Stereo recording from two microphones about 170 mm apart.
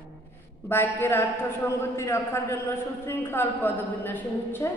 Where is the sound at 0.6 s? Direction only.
10° left (ahead or behind).